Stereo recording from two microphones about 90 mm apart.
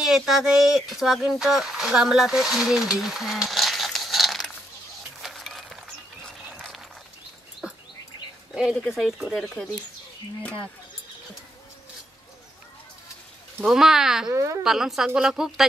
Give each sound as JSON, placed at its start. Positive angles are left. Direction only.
{"t": 0.0, "sound": "speech", "side_deg": 0}
{"t": 5.2, "sound": "a sound", "side_deg": 0}
{"t": 7.6, "sound": "bird", "side_deg": -10}
{"t": 8.9, "sound": "speech", "side_deg": 0}
{"t": 13.7, "sound": "speech", "side_deg": -5}
{"t": 14.3, "sound": "speech", "side_deg": -35}
{"t": 14.6, "sound": "speech", "side_deg": -5}